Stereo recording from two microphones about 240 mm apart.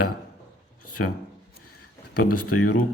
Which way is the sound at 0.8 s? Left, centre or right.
Left.